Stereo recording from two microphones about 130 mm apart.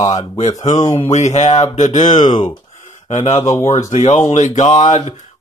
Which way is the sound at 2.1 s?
35° left (ahead or behind).